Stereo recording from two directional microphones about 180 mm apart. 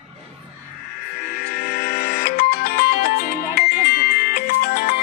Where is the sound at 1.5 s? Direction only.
55° left (ahead or behind).